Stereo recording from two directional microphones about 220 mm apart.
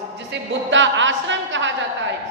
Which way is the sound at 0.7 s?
55° right (ahead or behind).